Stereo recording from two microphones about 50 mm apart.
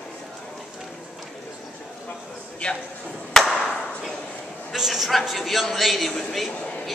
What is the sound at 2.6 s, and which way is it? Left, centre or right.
Speech, centre.